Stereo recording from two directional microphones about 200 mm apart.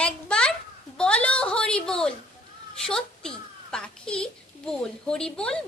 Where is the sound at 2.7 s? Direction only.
5° left (ahead or behind).